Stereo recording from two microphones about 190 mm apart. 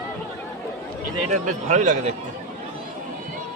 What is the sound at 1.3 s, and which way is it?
Speech, 40° right (ahead or behind).